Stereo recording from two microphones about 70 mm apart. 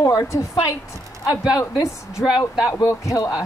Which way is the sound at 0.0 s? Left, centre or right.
Left.